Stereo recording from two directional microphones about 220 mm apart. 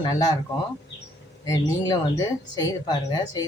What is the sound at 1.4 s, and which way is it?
Speech, 15° left (ahead or behind).